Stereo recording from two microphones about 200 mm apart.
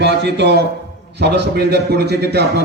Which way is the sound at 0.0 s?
60° right (ahead or behind).